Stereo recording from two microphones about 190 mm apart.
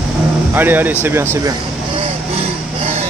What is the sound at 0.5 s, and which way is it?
Speech, 10° right (ahead or behind).